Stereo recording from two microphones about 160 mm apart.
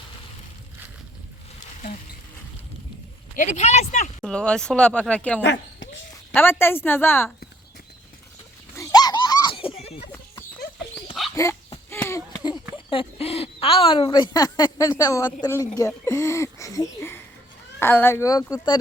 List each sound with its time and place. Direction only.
3.3 s speech: 50° left (ahead or behind)
4.2 s speech: 5° left (ahead or behind)
8.7 s a sound: 20° left (ahead or behind); by 10.1 s 40° left (ahead or behind)
11.3 s dog: 20° left (ahead or behind)
11.9 s a sound: 15° left (ahead or behind)
17.7 s speech: 15° left (ahead or behind)